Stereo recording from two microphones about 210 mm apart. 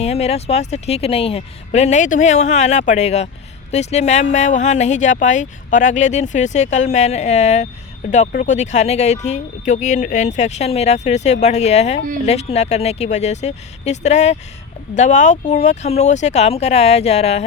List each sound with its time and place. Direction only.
0.0 s speech: 30° left (ahead or behind)